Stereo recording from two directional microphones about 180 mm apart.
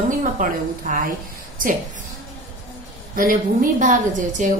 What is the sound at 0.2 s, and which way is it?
Speech, 50° right (ahead or behind).